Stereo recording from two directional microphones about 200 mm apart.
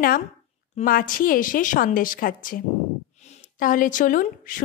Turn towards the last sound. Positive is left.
turn(degrees=45)  # may be behind; listen again after turning